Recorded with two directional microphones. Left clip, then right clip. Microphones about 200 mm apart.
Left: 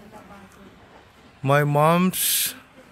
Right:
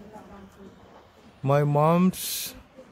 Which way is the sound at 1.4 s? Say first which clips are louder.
Left 3 dB; centre (ahead or behind).